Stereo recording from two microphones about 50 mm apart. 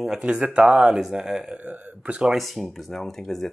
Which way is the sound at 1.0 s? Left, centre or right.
Centre.